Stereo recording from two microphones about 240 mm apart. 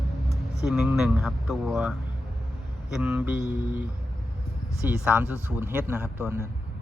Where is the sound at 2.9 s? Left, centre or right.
Centre.